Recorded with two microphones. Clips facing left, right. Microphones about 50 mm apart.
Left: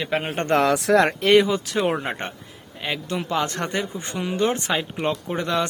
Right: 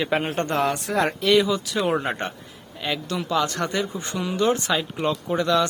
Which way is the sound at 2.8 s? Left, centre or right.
Left.